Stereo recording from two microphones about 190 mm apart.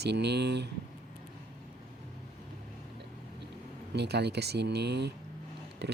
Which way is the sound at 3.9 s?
60° right (ahead or behind).